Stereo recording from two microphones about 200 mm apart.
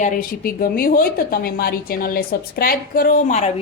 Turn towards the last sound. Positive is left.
turn(degrees=35)  # may be behind; listen again after turning